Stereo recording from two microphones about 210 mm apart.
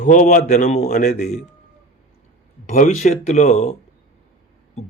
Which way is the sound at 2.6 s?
35° left (ahead or behind).